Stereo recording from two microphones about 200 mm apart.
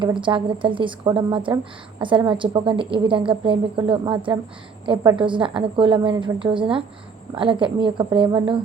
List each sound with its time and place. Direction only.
0.0 s a woman's voice: 25° right (ahead or behind)